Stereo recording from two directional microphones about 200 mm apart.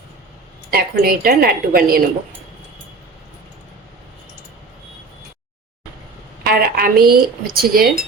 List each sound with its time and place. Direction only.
0.7 s speech: 50° right (ahead or behind)
6.4 s speech: 50° right (ahead or behind)